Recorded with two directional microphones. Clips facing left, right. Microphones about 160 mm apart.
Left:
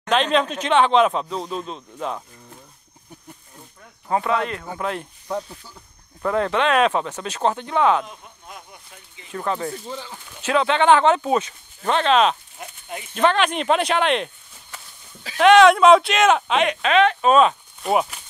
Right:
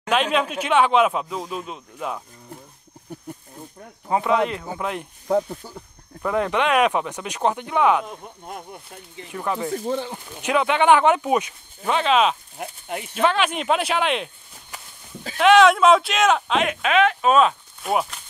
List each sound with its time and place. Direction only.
0.0 s speech: 10° right (ahead or behind)
4.1 s speech: 15° right (ahead or behind)
5.5 s speech: 45° right (ahead or behind)
6.2 s speech: 10° right (ahead or behind)
8.1 s speech: 45° right (ahead or behind)
9.3 s speech: 10° right (ahead or behind)
9.8 s speech: 55° right (ahead or behind)
10.0 s speech: 15° right (ahead or behind)
12.5 s speech: 60° right (ahead or behind)
13.1 s speech: 5° right (ahead or behind)